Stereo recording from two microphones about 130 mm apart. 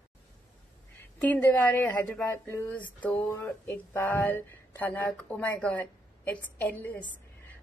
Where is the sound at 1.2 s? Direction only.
15° left (ahead or behind).